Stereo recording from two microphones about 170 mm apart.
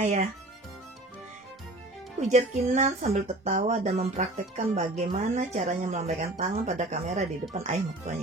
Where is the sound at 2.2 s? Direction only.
45° right (ahead or behind).